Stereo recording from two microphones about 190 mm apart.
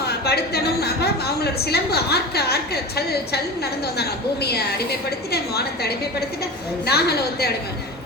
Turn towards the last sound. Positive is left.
turn(degrees=55)  # may be behind; listen again after turning